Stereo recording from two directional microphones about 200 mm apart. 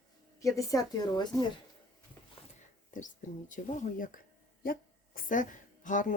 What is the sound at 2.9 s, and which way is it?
A woman's voice, 40° left (ahead or behind).